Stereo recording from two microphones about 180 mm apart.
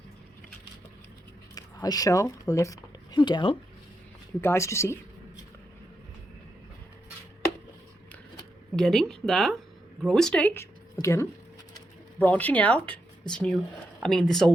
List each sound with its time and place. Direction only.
1.5 s speech: 20° left (ahead or behind)
4.4 s speech: 15° left (ahead or behind)
8.7 s speech: centre (ahead or behind)